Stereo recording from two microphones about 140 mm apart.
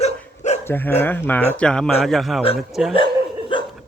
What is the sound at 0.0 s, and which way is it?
Dog, 55° left (ahead or behind).